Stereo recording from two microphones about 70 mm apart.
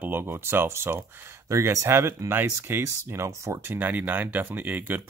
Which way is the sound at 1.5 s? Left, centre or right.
Right.